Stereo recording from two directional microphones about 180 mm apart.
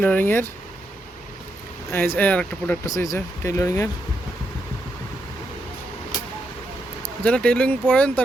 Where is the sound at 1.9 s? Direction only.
10° left (ahead or behind).